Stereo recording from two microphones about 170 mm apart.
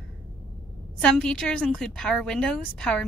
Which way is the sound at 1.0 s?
5° left (ahead or behind).